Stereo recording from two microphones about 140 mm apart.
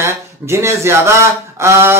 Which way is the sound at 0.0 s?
20° right (ahead or behind).